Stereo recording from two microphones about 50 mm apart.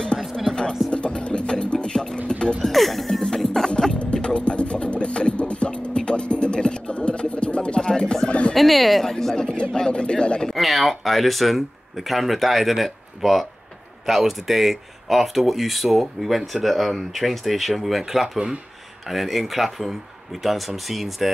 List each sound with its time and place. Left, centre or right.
0.2 s music: centre
0.8 s music: centre
2.6 s music: centre; by 8.5 s left
8.5 s speech: centre
9.1 s a sound: centre
10.5 s speech: centre